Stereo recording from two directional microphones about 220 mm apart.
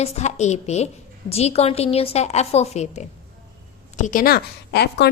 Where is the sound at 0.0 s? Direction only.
30° left (ahead or behind).